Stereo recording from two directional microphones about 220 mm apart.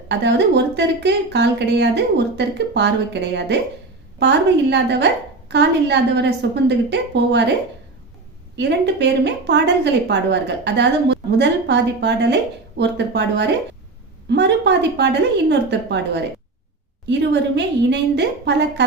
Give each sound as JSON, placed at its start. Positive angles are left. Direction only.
{"t": 0.1, "sound": "a woman's voice", "side_deg": -50}
{"t": 8.5, "sound": "a woman's voice", "side_deg": -50}